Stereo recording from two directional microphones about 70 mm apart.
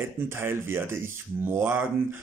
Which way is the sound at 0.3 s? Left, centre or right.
Right.